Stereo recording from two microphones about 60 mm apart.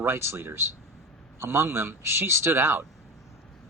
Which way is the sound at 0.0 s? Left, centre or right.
Right.